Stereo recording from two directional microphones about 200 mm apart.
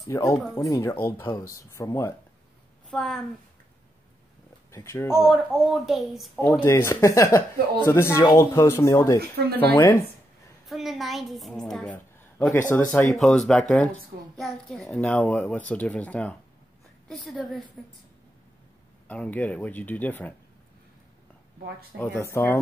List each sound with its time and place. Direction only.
0.0 s a child's voice: 15° left (ahead or behind)
2.9 s a woman's voice: centre (ahead or behind)
4.7 s a child's voice: 15° left (ahead or behind)
5.3 s a woman's voice: centre (ahead or behind)
6.6 s a child's voice: 15° left (ahead or behind)
10.7 s a woman's voice: centre (ahead or behind)
19.0 s a child's voice: 5° left (ahead or behind)
21.9 s a child's voice: 10° left (ahead or behind)